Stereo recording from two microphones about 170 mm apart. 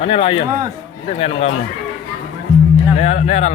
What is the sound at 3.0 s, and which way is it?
Speech, 40° left (ahead or behind).